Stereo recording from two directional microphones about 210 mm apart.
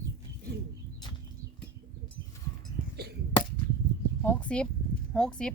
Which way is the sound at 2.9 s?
50° right (ahead or behind).